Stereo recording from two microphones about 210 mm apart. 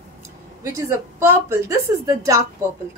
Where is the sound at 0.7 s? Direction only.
10° right (ahead or behind).